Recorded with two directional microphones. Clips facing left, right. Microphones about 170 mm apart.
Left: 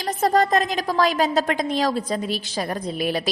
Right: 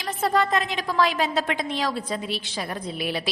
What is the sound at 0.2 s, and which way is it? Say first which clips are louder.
A woman's voice: left 4 dB; 40° left (ahead or behind).